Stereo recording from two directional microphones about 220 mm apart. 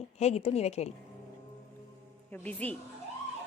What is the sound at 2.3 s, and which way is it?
Speech, 5° left (ahead or behind).